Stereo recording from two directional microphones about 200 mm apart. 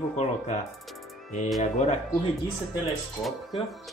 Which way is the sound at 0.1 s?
35° left (ahead or behind).